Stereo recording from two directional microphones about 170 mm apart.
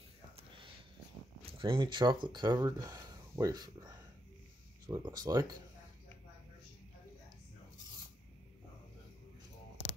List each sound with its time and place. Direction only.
1.5 s speech: 30° right (ahead or behind)